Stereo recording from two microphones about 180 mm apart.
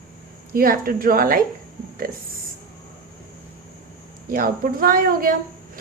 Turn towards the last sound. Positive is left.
turn(degrees=-50)  # may be behind; listen again after turning